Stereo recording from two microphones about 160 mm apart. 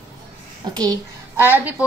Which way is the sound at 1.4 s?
15° right (ahead or behind).